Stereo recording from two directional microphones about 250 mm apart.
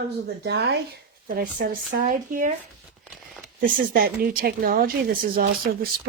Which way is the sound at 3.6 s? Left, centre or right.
Right.